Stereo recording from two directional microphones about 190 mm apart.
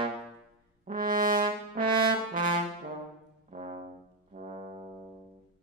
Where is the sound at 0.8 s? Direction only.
45° right (ahead or behind).